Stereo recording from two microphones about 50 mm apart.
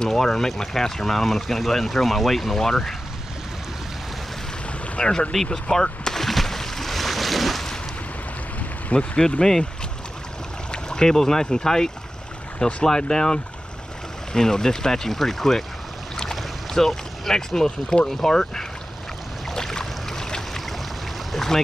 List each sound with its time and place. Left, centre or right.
0.0 s speech: centre
4.9 s speech: centre
5.3 s boat: centre
8.5 s a sound: left
9.1 s speech: centre
10.7 s speech: centre
19.5 s boat: centre
21.3 s a sound: centre